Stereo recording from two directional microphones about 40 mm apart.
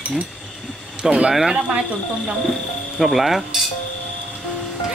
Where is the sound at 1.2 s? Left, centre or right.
Centre.